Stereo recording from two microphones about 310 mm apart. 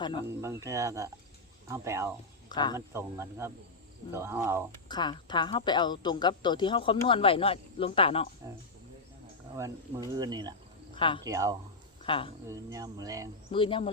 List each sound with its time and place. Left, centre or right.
0.4 s speech: centre
2.5 s speech: centre
2.7 s speech: centre
4.9 s a woman's voice: centre
9.6 s speech: centre
10.9 s speech: centre
11.3 s speech: centre
12.0 s speech: centre
12.5 s speech: centre
13.5 s a woman's voice: centre